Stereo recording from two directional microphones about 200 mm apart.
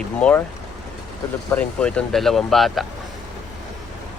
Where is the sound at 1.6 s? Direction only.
5° left (ahead or behind).